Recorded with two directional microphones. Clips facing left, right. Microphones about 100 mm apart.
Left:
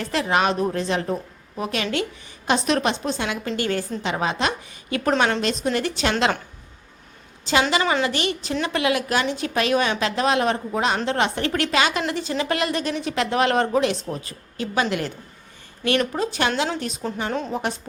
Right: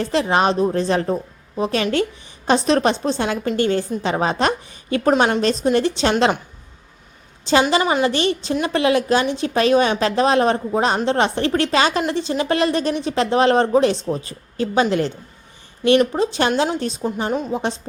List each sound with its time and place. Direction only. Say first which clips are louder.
0.0 s a woman's voice: right 4 dB; 30° right (ahead or behind)
5.6 s a woman's voice: right 5 dB; 25° right (ahead or behind)
7.8 s a woman's voice: right 3 dB; 20° right (ahead or behind)
8.0 s a woman's voice: right 5 dB; 30° right (ahead or behind)
16.1 s a woman's voice: right 4 dB; 25° right (ahead or behind)